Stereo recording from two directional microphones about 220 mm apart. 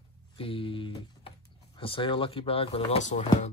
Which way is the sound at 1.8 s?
25° left (ahead or behind).